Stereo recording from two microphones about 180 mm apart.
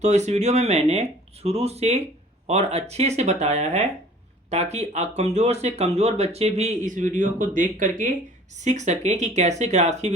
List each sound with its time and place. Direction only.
0.0 s speech: 40° right (ahead or behind)